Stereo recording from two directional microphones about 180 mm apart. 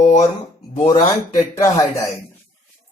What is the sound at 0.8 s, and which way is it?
Speech, 25° left (ahead or behind).